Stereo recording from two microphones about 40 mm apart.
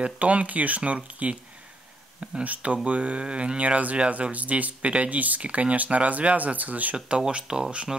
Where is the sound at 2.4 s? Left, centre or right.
Right.